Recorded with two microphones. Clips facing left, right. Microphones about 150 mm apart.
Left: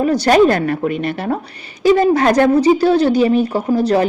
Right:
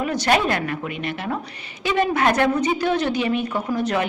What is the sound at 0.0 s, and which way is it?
A woman's voice, 35° left (ahead or behind).